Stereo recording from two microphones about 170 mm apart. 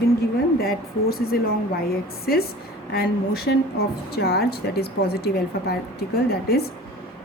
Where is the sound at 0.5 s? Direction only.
65° left (ahead or behind).